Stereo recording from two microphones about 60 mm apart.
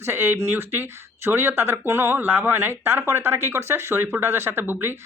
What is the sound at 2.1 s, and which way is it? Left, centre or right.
Speech, right.